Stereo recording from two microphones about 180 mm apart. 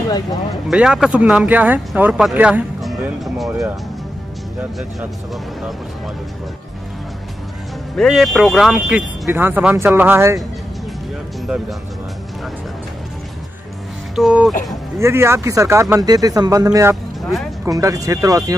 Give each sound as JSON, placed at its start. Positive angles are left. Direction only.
{"t": 0.7, "sound": "speech", "side_deg": -5}
{"t": 7.9, "sound": "speech", "side_deg": 0}
{"t": 14.1, "sound": "speech", "side_deg": -5}
{"t": 15.0, "sound": "speech", "side_deg": -15}
{"t": 16.9, "sound": "speech", "side_deg": 0}
{"t": 17.6, "sound": "speech", "side_deg": -20}